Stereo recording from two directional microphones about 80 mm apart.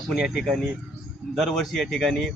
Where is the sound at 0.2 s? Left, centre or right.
Centre.